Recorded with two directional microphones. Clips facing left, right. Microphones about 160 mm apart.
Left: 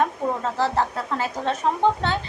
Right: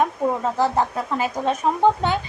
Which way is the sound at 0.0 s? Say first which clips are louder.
Right 2 dB; 15° right (ahead or behind).